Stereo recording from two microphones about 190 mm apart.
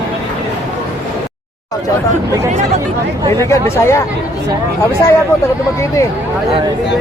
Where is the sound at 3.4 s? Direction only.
15° left (ahead or behind).